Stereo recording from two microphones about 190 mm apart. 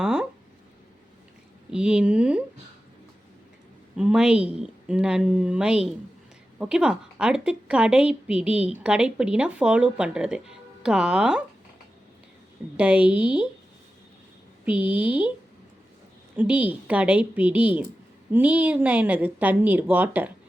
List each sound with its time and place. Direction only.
0.0 s a sound: 5° right (ahead or behind)
1.7 s speech: 5° right (ahead or behind)
3.9 s speech: 5° right (ahead or behind)
12.7 s a woman's voice: 5° right (ahead or behind)
14.6 s a woman's voice: 10° right (ahead or behind)
16.4 s a woman's voice: 10° right (ahead or behind)